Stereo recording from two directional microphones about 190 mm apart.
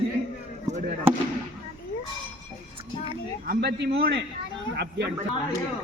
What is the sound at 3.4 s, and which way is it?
Speech, 55° right (ahead or behind).